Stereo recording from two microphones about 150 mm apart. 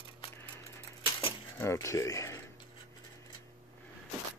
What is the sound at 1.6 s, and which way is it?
Speech, 20° left (ahead or behind).